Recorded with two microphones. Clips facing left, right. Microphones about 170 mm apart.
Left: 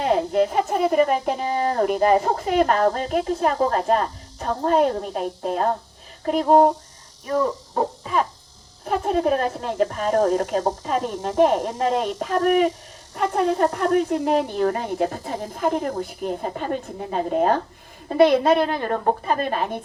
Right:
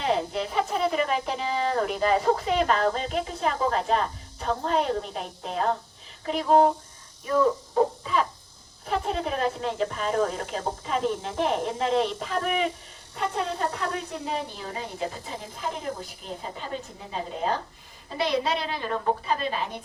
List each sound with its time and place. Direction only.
0.0 s speech: 50° left (ahead or behind)
9.0 s speech: 50° left (ahead or behind)